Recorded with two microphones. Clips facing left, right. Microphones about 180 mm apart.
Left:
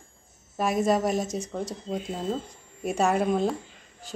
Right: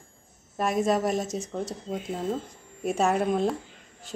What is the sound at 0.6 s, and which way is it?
A woman's voice, centre (ahead or behind).